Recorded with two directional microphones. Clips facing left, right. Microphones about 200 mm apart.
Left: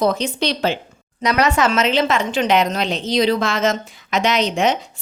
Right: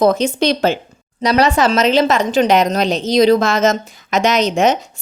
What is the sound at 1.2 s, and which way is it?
A woman's voice, 35° right (ahead or behind).